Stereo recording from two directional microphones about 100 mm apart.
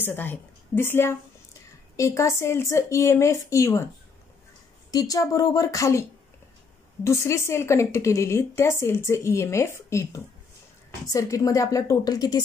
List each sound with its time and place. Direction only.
0.0 s a woman's voice: 20° left (ahead or behind)
4.9 s a woman's voice: 40° left (ahead or behind)